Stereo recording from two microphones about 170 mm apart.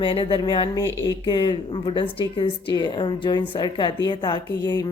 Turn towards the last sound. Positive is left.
turn(degrees=25)  # may be behind; listen again after turning